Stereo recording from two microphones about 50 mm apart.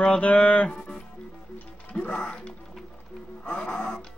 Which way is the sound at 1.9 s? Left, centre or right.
Left.